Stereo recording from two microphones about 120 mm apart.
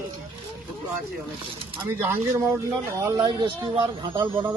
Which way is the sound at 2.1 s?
20° right (ahead or behind).